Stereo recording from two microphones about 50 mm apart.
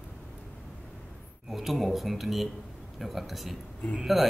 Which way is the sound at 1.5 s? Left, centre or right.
Centre.